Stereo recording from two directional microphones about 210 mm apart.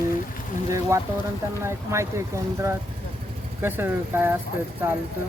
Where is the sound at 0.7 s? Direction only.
15° right (ahead or behind).